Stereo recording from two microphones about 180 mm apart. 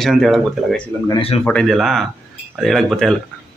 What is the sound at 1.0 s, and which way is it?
Speech, 30° left (ahead or behind).